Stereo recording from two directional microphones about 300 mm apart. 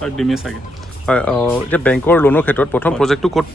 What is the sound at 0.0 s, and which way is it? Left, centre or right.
Speech, centre.